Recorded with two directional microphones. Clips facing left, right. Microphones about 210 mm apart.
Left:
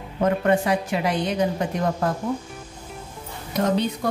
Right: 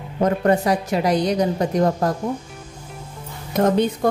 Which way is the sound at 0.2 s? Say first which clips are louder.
Right 2 dB; 40° right (ahead or behind).